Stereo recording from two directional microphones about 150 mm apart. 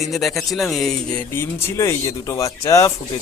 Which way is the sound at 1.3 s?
15° left (ahead or behind).